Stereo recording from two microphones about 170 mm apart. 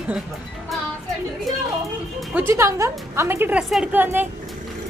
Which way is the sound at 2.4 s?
15° right (ahead or behind).